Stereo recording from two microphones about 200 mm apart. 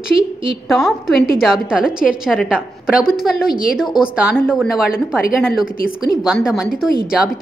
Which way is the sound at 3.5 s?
45° left (ahead or behind).